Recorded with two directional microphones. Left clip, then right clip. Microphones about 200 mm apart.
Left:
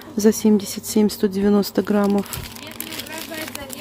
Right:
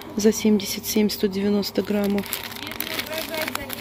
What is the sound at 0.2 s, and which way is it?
Speech, 25° left (ahead or behind).